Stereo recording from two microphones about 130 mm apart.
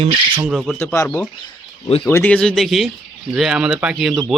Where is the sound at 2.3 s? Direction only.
5° left (ahead or behind).